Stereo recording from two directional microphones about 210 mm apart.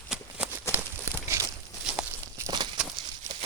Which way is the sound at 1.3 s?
10° right (ahead or behind).